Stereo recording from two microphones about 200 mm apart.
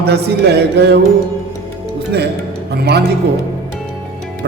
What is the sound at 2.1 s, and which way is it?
Speech, 55° right (ahead or behind).